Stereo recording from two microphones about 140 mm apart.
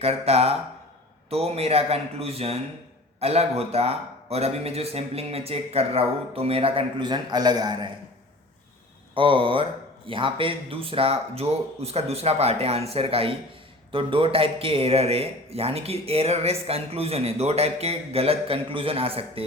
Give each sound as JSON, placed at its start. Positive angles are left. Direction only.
{"t": 0.0, "sound": "speech", "side_deg": -45}
{"t": 9.1, "sound": "speech", "side_deg": -40}